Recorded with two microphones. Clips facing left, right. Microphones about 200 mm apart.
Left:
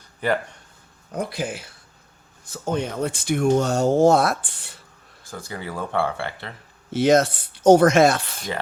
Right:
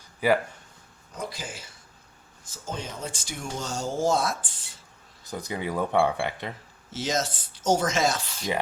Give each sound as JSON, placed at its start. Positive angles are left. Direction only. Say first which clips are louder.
{"t": 0.2, "sound": "speech", "louder": "right 1 dB", "side_deg": -5}
{"t": 1.1, "sound": "speech", "louder": "left 9 dB", "side_deg": 60}
{"t": 5.2, "sound": "speech", "louder": "right 2 dB", "side_deg": -20}
{"t": 6.9, "sound": "speech", "louder": "left 12 dB", "side_deg": 60}